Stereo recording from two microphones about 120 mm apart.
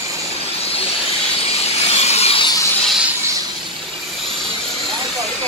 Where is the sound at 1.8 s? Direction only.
60° left (ahead or behind).